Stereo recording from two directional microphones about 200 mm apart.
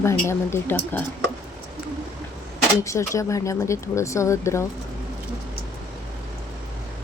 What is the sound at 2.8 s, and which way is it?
Speech, 15° left (ahead or behind).